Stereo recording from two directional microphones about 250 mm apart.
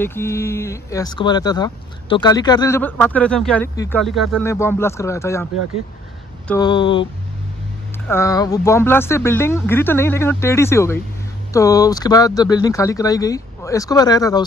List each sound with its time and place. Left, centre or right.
0.0 s speech: centre
8.1 s speech: centre